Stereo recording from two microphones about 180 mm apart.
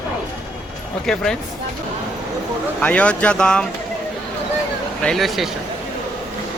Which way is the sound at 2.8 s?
5° left (ahead or behind).